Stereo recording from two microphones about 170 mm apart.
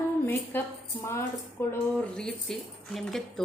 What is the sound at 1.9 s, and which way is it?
A woman's voice, 5° left (ahead or behind).